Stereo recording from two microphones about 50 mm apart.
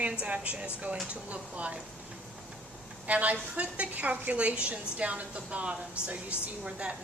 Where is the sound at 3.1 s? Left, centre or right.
Right.